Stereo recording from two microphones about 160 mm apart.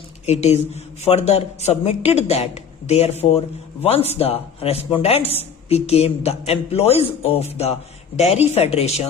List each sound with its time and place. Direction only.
0.3 s a man's voice: 40° left (ahead or behind)